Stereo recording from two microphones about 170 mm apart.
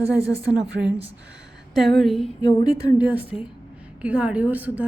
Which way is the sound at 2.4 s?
20° left (ahead or behind).